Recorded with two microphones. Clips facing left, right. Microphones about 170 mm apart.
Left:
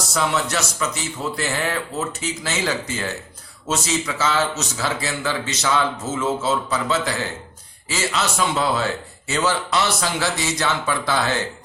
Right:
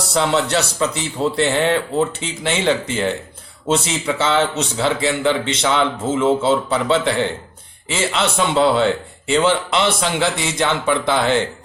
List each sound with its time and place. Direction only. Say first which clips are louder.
0.1 s a man's voice: right 5 dB; 30° right (ahead or behind)